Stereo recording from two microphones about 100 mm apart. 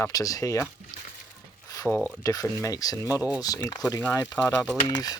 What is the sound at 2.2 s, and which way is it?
Speech, 35° left (ahead or behind).